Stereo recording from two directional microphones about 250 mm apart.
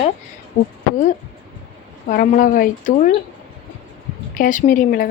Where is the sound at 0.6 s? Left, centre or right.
Left.